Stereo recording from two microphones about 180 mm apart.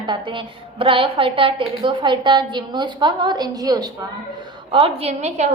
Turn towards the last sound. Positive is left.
turn(degrees=-35)  # may be behind; listen again after turning